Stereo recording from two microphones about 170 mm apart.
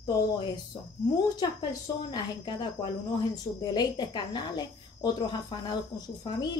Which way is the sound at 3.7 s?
25° left (ahead or behind).